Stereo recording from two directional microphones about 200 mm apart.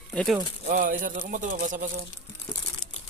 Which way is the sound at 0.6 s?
40° right (ahead or behind).